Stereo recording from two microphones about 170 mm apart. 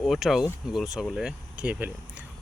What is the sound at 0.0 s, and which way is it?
Speech, centre (ahead or behind).